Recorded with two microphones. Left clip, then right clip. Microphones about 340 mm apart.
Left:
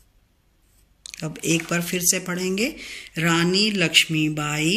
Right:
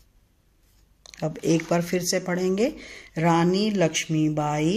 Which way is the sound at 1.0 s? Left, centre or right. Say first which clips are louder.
Right 1 dB; right.